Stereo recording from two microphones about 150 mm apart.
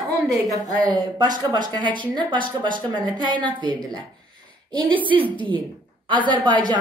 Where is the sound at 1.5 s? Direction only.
30° right (ahead or behind).